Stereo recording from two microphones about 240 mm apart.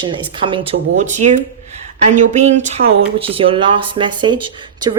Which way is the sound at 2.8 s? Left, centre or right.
Right.